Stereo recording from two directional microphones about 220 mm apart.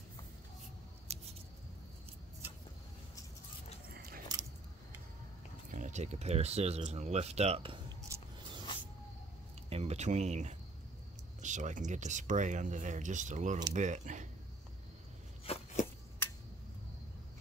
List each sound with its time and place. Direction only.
1.1 s scissors: 30° right (ahead or behind)
3.9 s biting: 45° right (ahead or behind)
5.7 s speech: 35° right (ahead or behind)
8.1 s a sound: 20° right (ahead or behind)
9.7 s speech: 30° right (ahead or behind)
15.4 s a sound: 30° left (ahead or behind)